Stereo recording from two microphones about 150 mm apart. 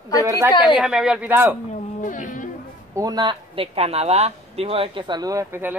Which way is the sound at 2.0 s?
60° left (ahead or behind).